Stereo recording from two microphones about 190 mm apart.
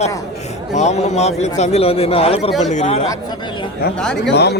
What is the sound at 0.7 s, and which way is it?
A man's voice, 35° left (ahead or behind).